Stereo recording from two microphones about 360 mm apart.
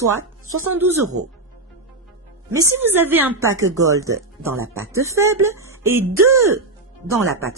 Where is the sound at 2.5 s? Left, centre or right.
Centre.